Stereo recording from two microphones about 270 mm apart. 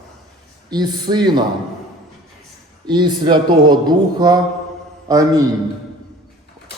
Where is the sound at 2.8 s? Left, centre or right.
Centre.